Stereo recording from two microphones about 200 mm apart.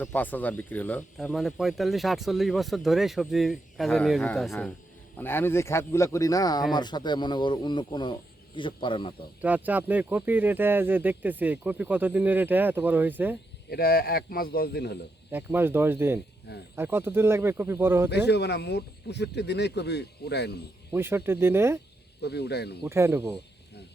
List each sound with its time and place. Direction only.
0.0 s speech: 10° left (ahead or behind); by 9.1 s 25° left (ahead or behind)
9.4 s speech: 10° right (ahead or behind)
13.7 s speech: 50° left (ahead or behind)
15.3 s speech: 10° right (ahead or behind)
18.3 s speech: 55° left (ahead or behind)
20.9 s speech: 10° right (ahead or behind)
22.2 s speech: 55° left (ahead or behind)
22.8 s speech: 15° right (ahead or behind)